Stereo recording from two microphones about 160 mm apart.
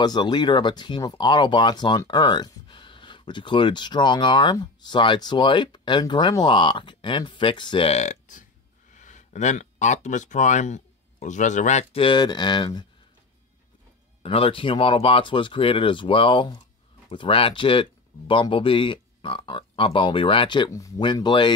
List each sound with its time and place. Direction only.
0.0 s speech: 25° left (ahead or behind); by 12.0 s 50° left (ahead or behind)
12.0 s speech: 30° left (ahead or behind)
14.2 s speech: 35° left (ahead or behind)